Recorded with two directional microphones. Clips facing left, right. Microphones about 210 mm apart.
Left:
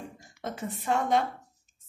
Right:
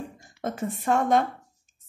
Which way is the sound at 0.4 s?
50° right (ahead or behind).